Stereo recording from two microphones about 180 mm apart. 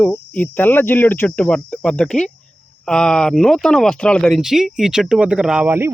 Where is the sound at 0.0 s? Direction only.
10° left (ahead or behind).